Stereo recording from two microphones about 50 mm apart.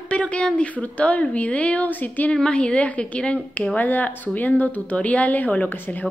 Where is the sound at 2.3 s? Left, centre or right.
Centre; by 6.1 s left.